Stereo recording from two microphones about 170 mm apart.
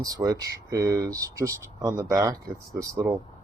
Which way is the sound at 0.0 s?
20° right (ahead or behind).